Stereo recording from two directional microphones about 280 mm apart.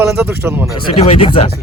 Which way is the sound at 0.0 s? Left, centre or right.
Centre.